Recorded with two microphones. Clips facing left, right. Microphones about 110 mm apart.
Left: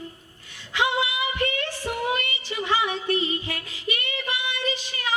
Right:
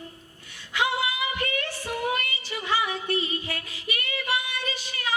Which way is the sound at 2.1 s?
25° left (ahead or behind).